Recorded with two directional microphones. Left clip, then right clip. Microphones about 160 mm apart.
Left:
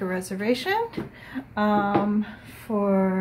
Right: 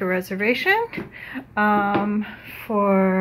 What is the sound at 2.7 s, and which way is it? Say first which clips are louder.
Speech: right 5 dB; 25° right (ahead or behind).